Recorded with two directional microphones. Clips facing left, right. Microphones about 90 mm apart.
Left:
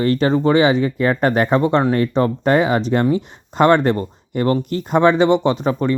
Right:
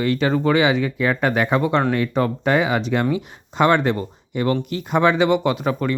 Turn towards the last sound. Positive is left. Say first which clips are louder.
# left 3 dB
turn(degrees=30)  # may be behind; listen again after turning